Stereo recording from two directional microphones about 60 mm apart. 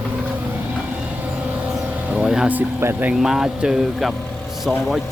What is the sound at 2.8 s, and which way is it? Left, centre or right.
Speech, right.